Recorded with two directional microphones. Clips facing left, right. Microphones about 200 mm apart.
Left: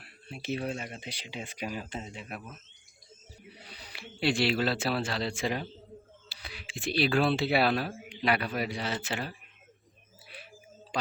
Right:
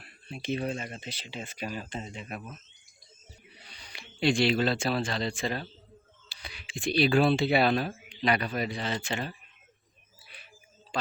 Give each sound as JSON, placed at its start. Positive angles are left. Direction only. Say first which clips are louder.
{"t": 0.0, "sound": "speech", "louder": "right 2 dB", "side_deg": 5}
{"t": 3.6, "sound": "speech", "louder": "left 4 dB", "side_deg": 5}
{"t": 10.9, "sound": "a sound", "louder": "even", "side_deg": 15}